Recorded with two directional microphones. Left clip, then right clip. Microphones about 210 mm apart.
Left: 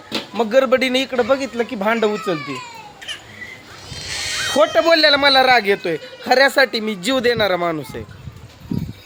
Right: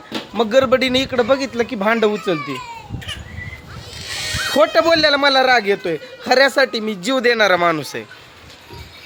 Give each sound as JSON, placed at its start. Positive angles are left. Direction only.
{"t": 0.3, "sound": "speech", "side_deg": -5}
{"t": 3.1, "sound": "bird", "side_deg": -30}
{"t": 3.9, "sound": "music", "side_deg": -35}
{"t": 4.5, "sound": "a man's voice", "side_deg": -5}